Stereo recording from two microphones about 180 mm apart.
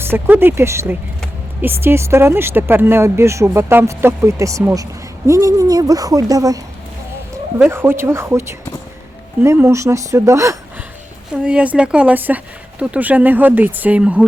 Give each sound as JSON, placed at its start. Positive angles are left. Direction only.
{"t": 0.0, "sound": "speech", "side_deg": -10}
{"t": 7.6, "sound": "speech", "side_deg": -10}